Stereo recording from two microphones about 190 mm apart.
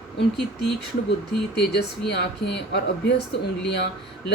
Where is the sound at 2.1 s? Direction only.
65° left (ahead or behind).